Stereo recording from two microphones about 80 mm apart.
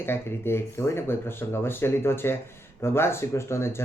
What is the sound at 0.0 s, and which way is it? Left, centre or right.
Speech, left.